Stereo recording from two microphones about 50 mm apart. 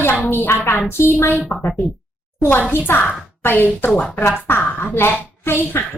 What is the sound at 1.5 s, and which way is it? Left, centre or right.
Speech, left.